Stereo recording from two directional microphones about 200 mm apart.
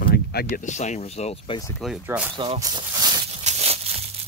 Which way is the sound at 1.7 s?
Centre (ahead or behind).